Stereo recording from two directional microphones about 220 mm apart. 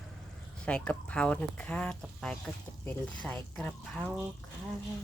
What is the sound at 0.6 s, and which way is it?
Speech, 5° left (ahead or behind).